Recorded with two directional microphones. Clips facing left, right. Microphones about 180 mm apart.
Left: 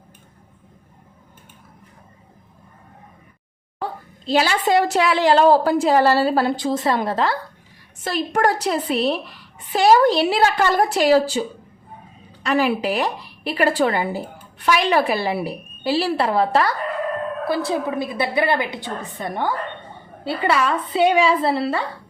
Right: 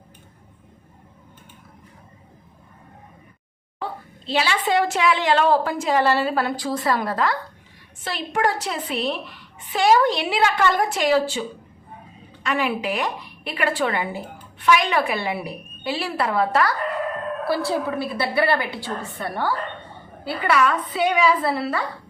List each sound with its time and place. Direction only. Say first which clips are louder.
3.8 s a sound: left 2 dB; 45° left (ahead or behind)
4.3 s a woman's voice: left 4 dB; 40° left (ahead or behind); by 7.3 s 25° left (ahead or behind)
8.0 s a woman's voice: left 4 dB; 40° left (ahead or behind)